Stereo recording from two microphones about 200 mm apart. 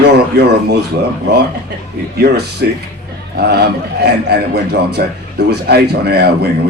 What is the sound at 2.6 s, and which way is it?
A man's voice, 55° right (ahead or behind).